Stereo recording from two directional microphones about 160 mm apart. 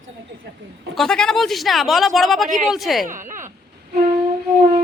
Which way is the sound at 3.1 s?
55° right (ahead or behind).